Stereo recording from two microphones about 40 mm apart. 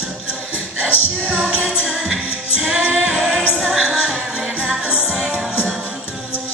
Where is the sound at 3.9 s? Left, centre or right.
Centre.